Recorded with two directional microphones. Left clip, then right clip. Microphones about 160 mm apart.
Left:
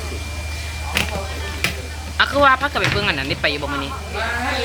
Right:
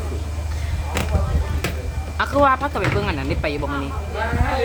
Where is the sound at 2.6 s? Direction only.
10° right (ahead or behind).